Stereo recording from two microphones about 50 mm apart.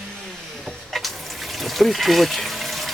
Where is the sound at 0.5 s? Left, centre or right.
Centre.